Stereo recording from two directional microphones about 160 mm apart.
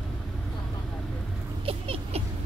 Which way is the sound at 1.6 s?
35° right (ahead or behind).